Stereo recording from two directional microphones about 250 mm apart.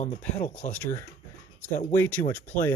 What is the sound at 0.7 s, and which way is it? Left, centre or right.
Speech, centre.